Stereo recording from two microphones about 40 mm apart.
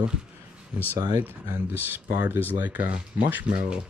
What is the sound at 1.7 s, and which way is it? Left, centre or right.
Speech, right.